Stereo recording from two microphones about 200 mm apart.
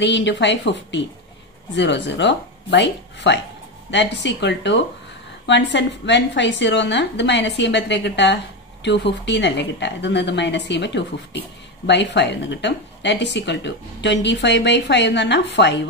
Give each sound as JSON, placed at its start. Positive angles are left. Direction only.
{"t": 0.0, "sound": "speech", "side_deg": 60}